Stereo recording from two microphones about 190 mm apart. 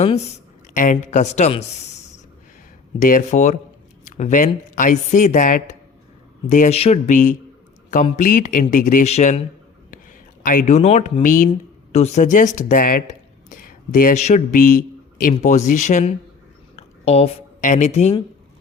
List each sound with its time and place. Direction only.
0.0 s speech: 35° left (ahead or behind)
3.0 s speech: 40° left (ahead or behind)
10.4 s speech: 45° left (ahead or behind)
16.7 s a sound: 30° left (ahead or behind)